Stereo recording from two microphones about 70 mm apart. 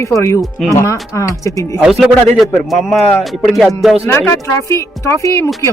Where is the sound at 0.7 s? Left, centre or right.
Left.